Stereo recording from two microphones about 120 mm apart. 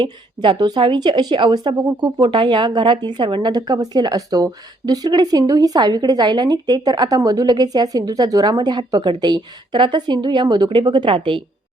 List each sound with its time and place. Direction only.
0.4 s a woman's voice: 40° right (ahead or behind)